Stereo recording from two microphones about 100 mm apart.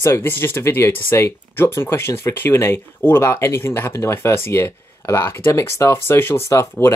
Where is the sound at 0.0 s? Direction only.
25° left (ahead or behind).